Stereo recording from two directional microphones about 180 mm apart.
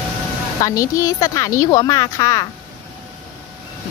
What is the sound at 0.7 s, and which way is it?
A woman's voice, 20° left (ahead or behind).